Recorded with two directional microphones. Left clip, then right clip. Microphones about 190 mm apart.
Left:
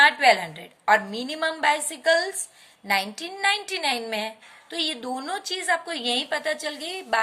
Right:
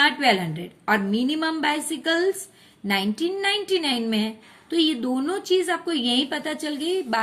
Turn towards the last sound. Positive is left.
turn(degrees=15)  # may be behind; listen again after turning